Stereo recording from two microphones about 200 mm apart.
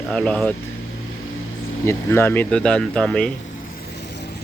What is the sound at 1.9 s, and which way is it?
Speech, 10° left (ahead or behind).